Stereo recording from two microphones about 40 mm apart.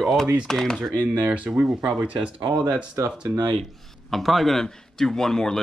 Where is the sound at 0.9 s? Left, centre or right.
Right.